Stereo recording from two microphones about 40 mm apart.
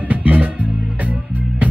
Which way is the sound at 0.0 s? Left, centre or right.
Right.